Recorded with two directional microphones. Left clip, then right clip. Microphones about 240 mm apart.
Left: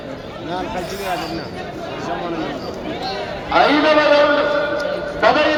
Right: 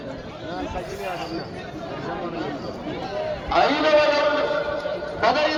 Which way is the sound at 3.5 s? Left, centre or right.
Right.